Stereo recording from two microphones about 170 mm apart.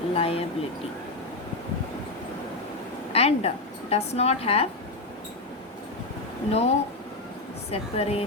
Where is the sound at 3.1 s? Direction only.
35° left (ahead or behind).